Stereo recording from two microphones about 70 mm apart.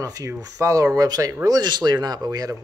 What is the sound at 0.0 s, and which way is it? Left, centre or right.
Speech, right.